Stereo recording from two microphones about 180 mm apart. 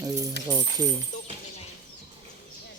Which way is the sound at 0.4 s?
20° right (ahead or behind).